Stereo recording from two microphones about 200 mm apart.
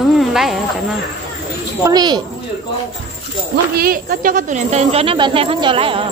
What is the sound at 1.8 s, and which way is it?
Speech, 20° right (ahead or behind).